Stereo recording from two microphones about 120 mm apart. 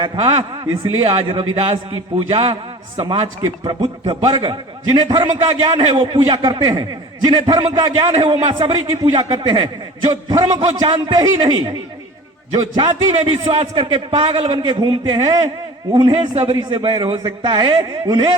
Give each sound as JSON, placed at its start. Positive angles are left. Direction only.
{"t": 0.0, "sound": "a man's voice", "side_deg": -40}
{"t": 3.4, "sound": "a man's voice", "side_deg": -35}